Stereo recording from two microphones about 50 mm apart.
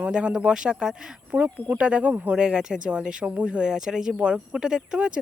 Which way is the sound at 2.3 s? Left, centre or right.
Centre.